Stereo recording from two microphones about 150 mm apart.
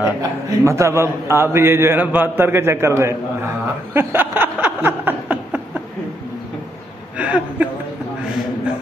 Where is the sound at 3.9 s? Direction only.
15° right (ahead or behind).